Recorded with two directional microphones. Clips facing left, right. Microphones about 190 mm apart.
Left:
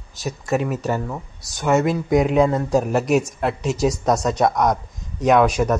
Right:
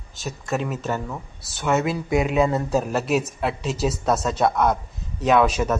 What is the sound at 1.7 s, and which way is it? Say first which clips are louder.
Speech: left 4 dB; centre (ahead or behind).